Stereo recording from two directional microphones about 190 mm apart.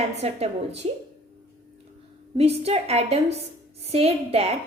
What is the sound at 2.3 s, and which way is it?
Speech, 30° right (ahead or behind).